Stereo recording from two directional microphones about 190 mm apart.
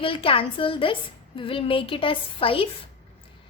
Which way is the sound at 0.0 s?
30° left (ahead or behind).